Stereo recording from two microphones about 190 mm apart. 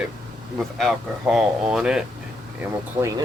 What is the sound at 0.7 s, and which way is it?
Speech, centre (ahead or behind).